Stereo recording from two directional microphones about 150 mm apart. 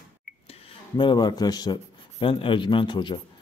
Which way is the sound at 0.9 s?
30° left (ahead or behind).